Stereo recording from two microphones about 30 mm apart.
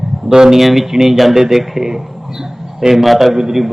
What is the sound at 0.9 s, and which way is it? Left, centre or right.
A man's voice, centre.